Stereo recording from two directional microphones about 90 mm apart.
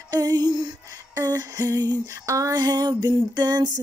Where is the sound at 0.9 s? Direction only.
35° right (ahead or behind).